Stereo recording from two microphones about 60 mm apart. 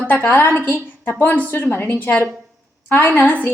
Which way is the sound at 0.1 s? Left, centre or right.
Left.